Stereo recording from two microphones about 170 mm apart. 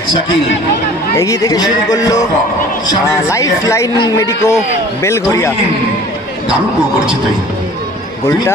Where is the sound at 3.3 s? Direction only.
20° left (ahead or behind).